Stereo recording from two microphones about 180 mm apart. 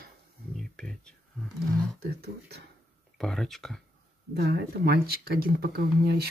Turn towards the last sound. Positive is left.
turn(degrees=-60)  # may be behind; listen again after turning